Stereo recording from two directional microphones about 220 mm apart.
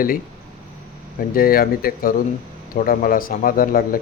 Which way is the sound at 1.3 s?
40° left (ahead or behind).